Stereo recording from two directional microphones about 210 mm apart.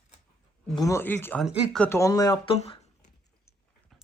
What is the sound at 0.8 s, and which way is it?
Speech, 15° left (ahead or behind).